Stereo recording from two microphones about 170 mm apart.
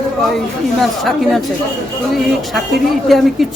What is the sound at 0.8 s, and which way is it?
Speech, centre (ahead or behind).